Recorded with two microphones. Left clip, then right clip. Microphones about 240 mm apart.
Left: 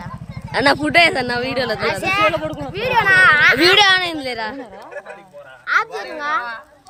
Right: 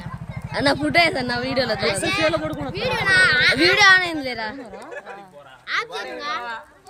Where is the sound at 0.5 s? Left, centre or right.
Centre.